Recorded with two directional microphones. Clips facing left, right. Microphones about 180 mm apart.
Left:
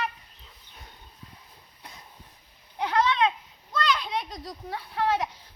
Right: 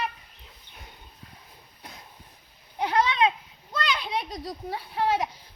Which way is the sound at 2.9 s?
15° right (ahead or behind).